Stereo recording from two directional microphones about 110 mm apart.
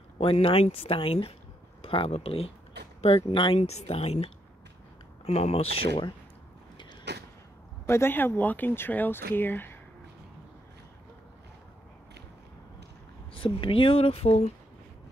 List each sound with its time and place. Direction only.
0.2 s speech: 55° left (ahead or behind)
3.3 s speech: 50° left (ahead or behind)
3.5 s speech: 75° left (ahead or behind); by 6.0 s 60° left (ahead or behind)
7.9 s speech: 20° left (ahead or behind)
13.3 s speech: 50° left (ahead or behind)